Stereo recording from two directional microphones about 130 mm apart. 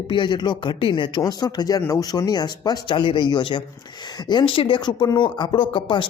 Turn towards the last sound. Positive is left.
turn(degrees=40)  # may be behind; listen again after turning